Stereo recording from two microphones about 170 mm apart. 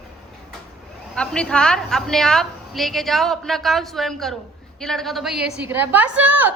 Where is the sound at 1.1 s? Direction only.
5° left (ahead or behind).